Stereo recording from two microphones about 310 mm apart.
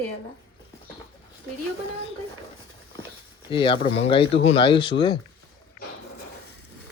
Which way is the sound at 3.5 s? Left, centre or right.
Centre.